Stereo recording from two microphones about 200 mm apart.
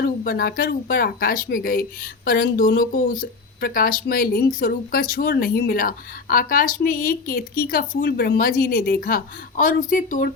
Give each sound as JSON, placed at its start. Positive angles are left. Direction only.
{"t": 0.0, "sound": "speech", "side_deg": 50}